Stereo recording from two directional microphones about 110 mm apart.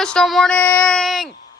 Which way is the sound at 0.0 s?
5° left (ahead or behind).